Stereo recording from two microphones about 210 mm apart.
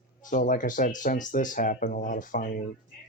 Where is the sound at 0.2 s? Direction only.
40° left (ahead or behind).